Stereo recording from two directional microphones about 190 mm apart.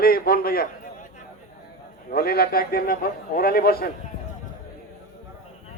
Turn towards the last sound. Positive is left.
turn(degrees=55)  # may be behind; listen again after turning